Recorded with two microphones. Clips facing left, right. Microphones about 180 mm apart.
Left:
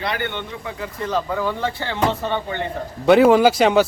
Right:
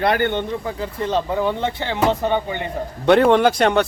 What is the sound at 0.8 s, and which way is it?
Speech, 30° right (ahead or behind).